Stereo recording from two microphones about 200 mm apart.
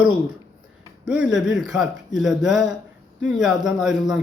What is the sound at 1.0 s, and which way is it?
Speech, 5° right (ahead or behind).